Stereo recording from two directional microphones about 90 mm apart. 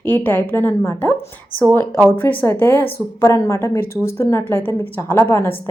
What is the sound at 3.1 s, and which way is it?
A woman's voice, 35° left (ahead or behind).